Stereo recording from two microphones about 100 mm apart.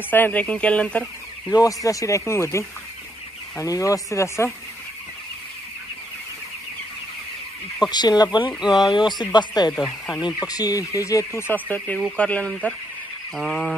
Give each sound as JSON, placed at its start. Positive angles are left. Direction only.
{"t": 0.1, "sound": "speech", "side_deg": 15}
{"t": 1.5, "sound": "speech", "side_deg": 35}
{"t": 7.9, "sound": "speech", "side_deg": 45}
{"t": 8.5, "sound": "speech", "side_deg": -5}
{"t": 8.9, "sound": "speech", "side_deg": 50}
{"t": 13.4, "sound": "speech", "side_deg": 0}